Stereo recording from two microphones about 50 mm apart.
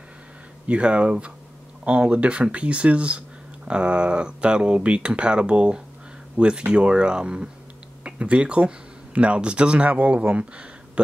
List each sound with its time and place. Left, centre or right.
0.7 s speech: right